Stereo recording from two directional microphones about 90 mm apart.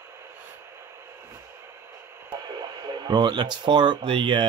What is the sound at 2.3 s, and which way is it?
Speech, 50° right (ahead or behind).